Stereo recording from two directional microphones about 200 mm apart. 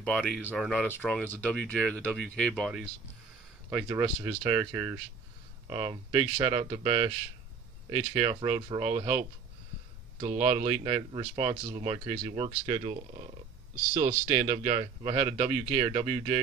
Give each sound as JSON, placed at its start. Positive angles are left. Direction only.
{"t": 0.0, "sound": "speech", "side_deg": 0}
{"t": 3.7, "sound": "speech", "side_deg": -15}
{"t": 10.2, "sound": "speech", "side_deg": -30}
{"t": 14.3, "sound": "speech", "side_deg": -25}